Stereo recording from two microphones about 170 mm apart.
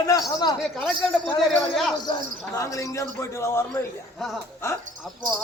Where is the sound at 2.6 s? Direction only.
15° left (ahead or behind).